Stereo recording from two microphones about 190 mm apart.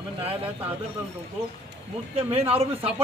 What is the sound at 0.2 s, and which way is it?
Speech, 30° right (ahead or behind).